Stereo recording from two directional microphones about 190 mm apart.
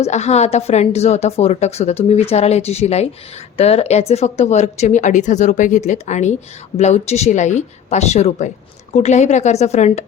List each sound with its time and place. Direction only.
0.0 s a woman's voice: 35° left (ahead or behind)